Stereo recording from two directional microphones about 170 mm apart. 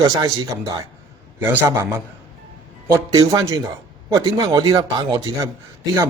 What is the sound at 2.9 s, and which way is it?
A man's voice, 20° right (ahead or behind).